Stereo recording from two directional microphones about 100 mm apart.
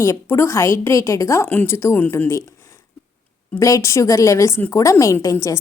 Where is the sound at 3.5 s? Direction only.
30° left (ahead or behind).